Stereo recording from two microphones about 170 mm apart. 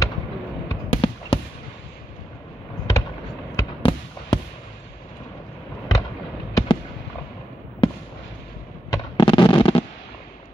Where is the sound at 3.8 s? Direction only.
30° left (ahead or behind).